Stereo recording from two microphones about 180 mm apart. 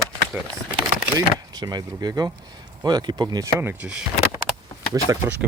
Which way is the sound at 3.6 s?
10° right (ahead or behind).